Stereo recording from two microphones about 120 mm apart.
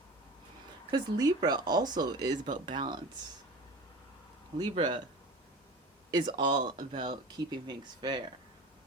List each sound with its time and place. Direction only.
0.9 s speech: 35° right (ahead or behind)
4.7 s speech: 40° right (ahead or behind)
6.1 s speech: 35° right (ahead or behind)